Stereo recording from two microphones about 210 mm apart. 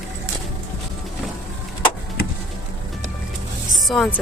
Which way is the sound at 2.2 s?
45° left (ahead or behind).